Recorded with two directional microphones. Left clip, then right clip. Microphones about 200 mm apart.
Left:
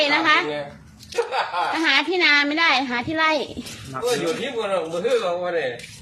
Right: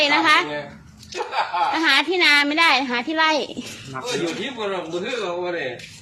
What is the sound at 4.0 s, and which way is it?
Speech, 15° left (ahead or behind).